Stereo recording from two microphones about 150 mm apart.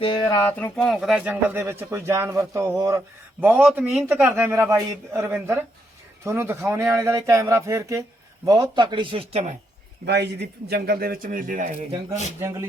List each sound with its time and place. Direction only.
0.0 s speech: 30° left (ahead or behind)
0.3 s speech: 15° left (ahead or behind)
0.9 s a man's voice: 5° right (ahead or behind); by 3.0 s 20° right (ahead or behind)
3.4 s a man's voice: 10° right (ahead or behind)
8.7 s speech: 30° right (ahead or behind); by 9.6 s 45° right (ahead or behind)
10.1 s a man's voice: 90° right; by 11.9 s 60° right (ahead or behind)
12.4 s speech: 20° right (ahead or behind)